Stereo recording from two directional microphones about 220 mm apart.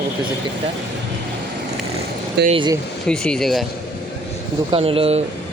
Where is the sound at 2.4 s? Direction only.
20° right (ahead or behind).